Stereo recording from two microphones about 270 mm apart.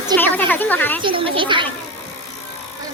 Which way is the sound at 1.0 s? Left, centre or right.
Centre.